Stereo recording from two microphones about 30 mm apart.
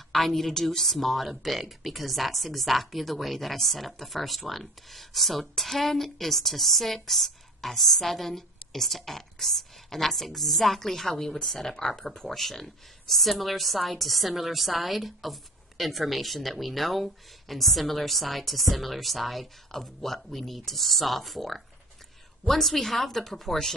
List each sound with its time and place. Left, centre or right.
0.1 s speech: centre
12.4 s a woman's voice: centre